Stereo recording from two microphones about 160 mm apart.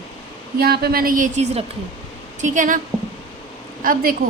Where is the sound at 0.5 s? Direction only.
75° right (ahead or behind); by 1.7 s 45° right (ahead or behind).